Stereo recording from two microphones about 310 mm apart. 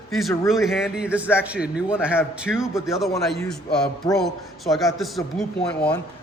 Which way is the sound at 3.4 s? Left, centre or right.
Centre.